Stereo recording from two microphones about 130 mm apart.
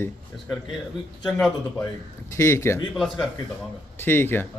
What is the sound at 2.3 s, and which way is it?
Speech, 20° left (ahead or behind).